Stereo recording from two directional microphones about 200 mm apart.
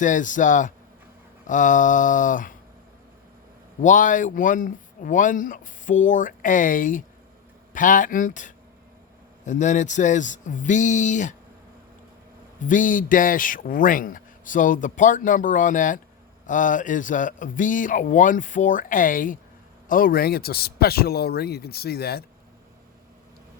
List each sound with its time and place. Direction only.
0.0 s a man's voice: 40° left (ahead or behind)
3.8 s a man's voice: 40° left (ahead or behind)
12.6 s a man's voice: 40° left (ahead or behind)